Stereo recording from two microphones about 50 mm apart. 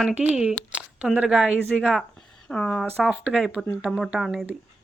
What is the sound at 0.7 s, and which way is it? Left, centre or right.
Speech, right.